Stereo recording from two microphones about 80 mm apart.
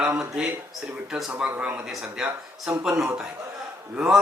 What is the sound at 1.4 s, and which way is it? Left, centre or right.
Speech, centre.